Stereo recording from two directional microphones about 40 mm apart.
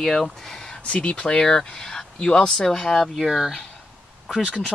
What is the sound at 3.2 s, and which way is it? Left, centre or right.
Speech, centre.